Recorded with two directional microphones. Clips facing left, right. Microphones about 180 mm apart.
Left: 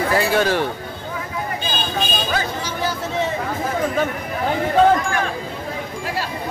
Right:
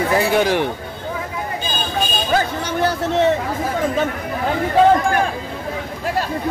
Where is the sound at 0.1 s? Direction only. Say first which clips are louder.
Right 2 dB; 15° right (ahead or behind).